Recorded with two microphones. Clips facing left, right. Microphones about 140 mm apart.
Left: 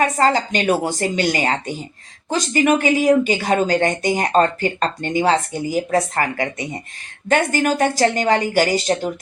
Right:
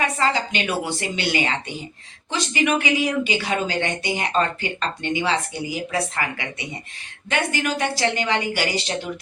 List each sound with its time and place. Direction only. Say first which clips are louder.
0.0 s speech: left 5 dB; 45° left (ahead or behind)